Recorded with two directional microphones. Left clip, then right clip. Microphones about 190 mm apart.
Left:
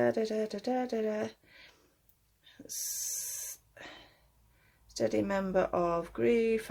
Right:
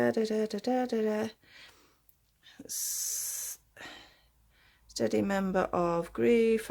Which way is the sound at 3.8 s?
35° right (ahead or behind).